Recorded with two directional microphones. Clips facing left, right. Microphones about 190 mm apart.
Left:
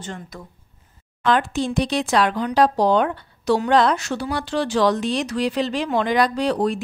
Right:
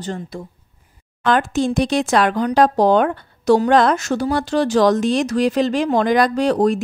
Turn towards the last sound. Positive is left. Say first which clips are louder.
# right 5 dB
turn(degrees=-45)  # may be behind; listen again after turning